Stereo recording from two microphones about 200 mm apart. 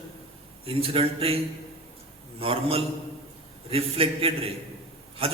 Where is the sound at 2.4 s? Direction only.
30° right (ahead or behind).